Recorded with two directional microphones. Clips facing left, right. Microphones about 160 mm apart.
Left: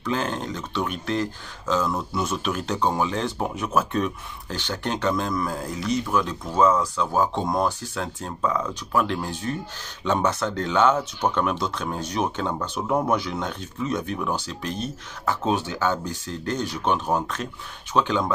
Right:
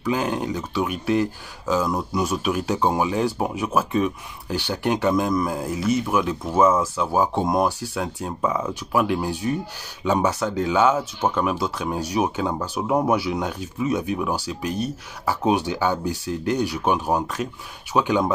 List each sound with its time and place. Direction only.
0.0 s speech: 10° right (ahead or behind)